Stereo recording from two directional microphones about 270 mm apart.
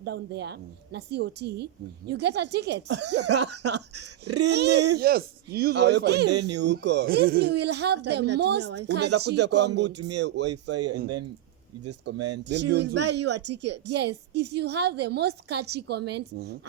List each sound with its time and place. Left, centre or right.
0.0 s a woman's voice: right
3.9 s speech: right
4.5 s a woman's voice: right
10.0 s speech: right
10.2 s a woman's voice: right
10.5 s speech: right
12.1 s speech: right
12.5 s a woman's voice: right